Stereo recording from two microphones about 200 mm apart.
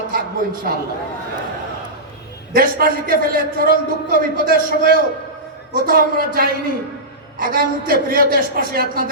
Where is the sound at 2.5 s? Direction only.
45° right (ahead or behind).